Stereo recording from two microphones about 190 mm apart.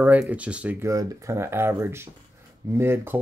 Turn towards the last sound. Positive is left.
turn(degrees=-10)  # may be behind; listen again after turning